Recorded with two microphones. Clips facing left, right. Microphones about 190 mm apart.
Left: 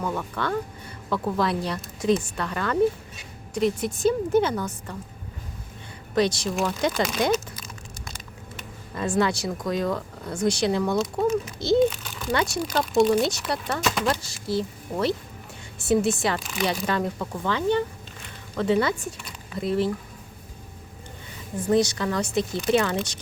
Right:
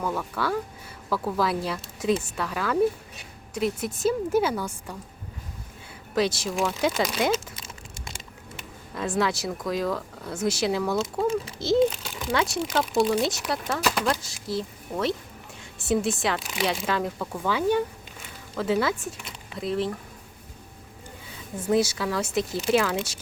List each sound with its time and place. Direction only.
0.0 s a woman's voice: 5° right (ahead or behind)
6.1 s speech: 5° right (ahead or behind)
7.3 s a sound: 25° right (ahead or behind)
9.0 s speech: centre (ahead or behind)
21.6 s speech: 5° right (ahead or behind)